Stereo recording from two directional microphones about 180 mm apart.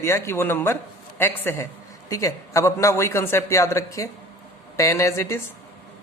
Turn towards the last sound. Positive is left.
turn(degrees=15)  # may be behind; listen again after turning